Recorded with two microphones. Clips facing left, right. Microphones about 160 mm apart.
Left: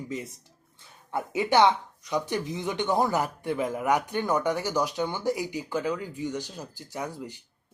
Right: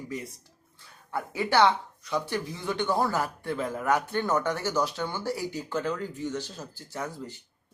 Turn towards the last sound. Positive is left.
turn(degrees=15)  # may be behind; listen again after turning